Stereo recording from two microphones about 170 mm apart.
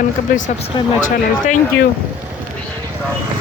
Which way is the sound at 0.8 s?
25° left (ahead or behind).